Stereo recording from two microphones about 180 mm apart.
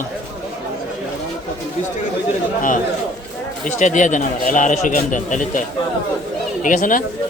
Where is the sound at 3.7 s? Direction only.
45° left (ahead or behind).